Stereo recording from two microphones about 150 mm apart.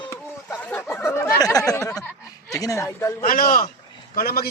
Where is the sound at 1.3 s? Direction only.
25° left (ahead or behind).